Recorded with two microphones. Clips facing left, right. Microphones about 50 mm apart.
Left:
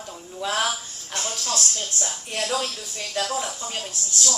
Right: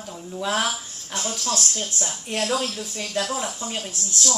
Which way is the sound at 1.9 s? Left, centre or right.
Centre.